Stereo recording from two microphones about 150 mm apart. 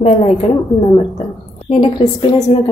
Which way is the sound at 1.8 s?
30° left (ahead or behind).